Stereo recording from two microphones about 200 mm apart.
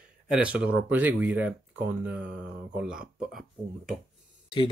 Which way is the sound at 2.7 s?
5° right (ahead or behind).